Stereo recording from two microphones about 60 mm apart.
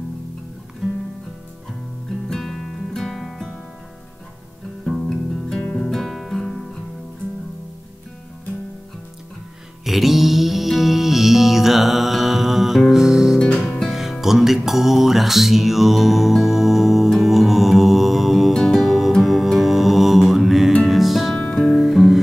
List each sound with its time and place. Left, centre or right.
2.2 s music: centre
4.8 s music: centre
5.8 s guitar: centre
9.8 s music: centre
13.4 s music: centre
13.8 s music: centre
21.4 s music: centre
21.7 s music: centre